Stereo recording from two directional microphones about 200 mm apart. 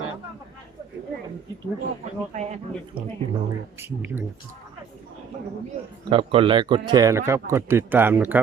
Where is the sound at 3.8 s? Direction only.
10° right (ahead or behind).